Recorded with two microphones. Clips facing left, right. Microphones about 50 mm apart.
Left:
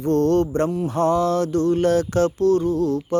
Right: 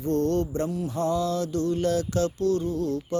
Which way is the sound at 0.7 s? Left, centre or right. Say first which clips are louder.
Left 6 dB; left.